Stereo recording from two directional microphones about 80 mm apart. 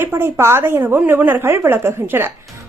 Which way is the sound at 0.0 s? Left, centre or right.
Right.